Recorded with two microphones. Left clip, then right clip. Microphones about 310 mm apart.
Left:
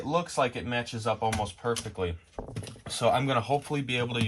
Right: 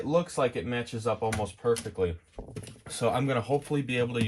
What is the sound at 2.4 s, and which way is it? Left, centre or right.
Speech, right.